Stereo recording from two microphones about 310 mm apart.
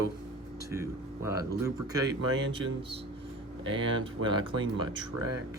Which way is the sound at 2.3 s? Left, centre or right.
Right.